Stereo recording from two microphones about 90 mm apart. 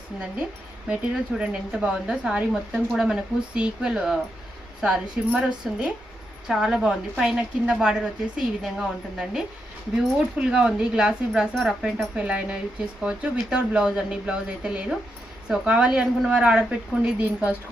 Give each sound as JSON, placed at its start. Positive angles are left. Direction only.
{"t": 0.9, "sound": "speech", "side_deg": -10}
{"t": 10.2, "sound": "speech", "side_deg": -10}